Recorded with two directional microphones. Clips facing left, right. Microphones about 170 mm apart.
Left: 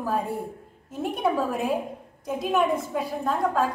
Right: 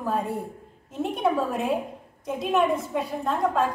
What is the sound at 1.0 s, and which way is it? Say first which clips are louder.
A woman's voice: right 1 dB; centre (ahead or behind).